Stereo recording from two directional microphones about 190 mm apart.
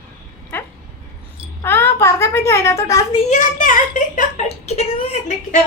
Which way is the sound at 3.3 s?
45° left (ahead or behind).